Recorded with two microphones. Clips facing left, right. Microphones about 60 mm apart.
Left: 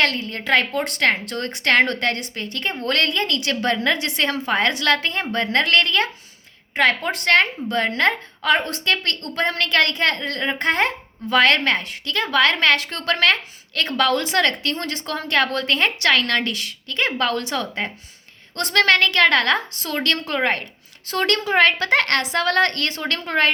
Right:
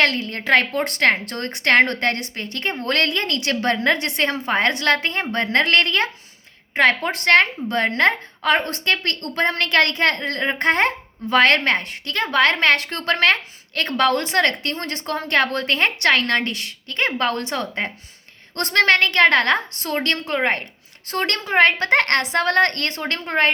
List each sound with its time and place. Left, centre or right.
0.0 s a woman's voice: right
20.1 s a woman's voice: right